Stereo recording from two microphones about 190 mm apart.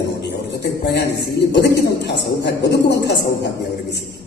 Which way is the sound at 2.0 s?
60° left (ahead or behind).